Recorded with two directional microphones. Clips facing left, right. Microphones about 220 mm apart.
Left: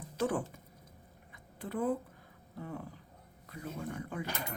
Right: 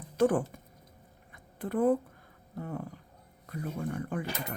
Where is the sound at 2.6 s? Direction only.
50° right (ahead or behind).